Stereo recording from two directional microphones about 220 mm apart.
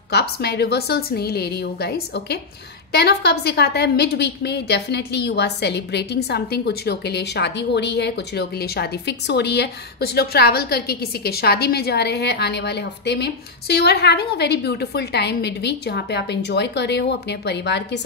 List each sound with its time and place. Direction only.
0.1 s a woman's voice: 50° left (ahead or behind)